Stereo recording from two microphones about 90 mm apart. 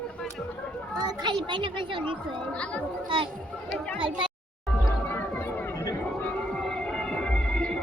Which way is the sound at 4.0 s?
65° right (ahead or behind).